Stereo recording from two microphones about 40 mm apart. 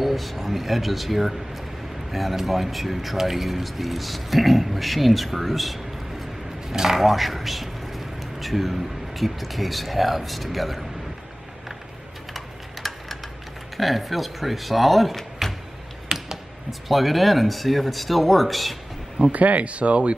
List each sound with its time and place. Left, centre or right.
0.0 s speech: centre
6.7 s speech: centre
7.1 s speech: centre
12.4 s a sound: centre
13.7 s speech: centre
16.1 s a sound: centre
16.8 s speech: centre
19.3 s speech: right